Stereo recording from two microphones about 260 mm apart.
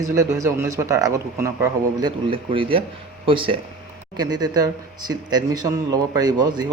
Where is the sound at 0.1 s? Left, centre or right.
Centre.